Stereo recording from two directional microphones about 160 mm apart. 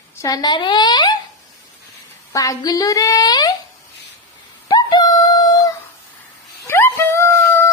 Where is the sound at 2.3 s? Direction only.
20° left (ahead or behind).